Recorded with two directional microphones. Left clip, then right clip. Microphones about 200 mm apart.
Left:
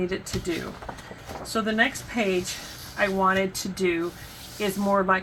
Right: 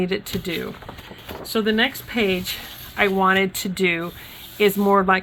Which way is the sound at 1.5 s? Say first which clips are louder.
Right 3 dB; 55° right (ahead or behind).